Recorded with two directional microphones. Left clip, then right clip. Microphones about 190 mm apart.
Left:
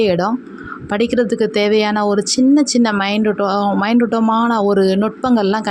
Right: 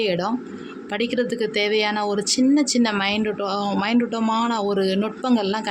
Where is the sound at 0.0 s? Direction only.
35° left (ahead or behind).